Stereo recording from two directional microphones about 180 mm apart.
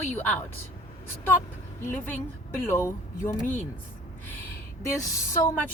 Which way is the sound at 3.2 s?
50° left (ahead or behind).